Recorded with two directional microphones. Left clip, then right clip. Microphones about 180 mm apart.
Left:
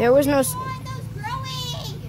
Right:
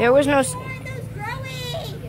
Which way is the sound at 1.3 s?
45° left (ahead or behind).